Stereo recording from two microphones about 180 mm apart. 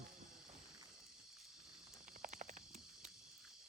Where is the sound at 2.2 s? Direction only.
45° right (ahead or behind).